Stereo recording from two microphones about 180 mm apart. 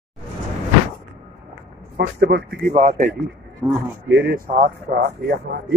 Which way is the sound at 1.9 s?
60° right (ahead or behind).